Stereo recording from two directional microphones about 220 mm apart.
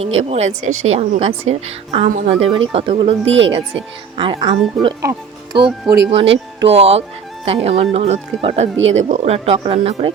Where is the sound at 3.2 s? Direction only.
60° right (ahead or behind).